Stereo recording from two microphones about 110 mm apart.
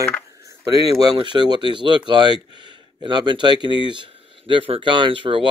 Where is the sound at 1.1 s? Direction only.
45° right (ahead or behind).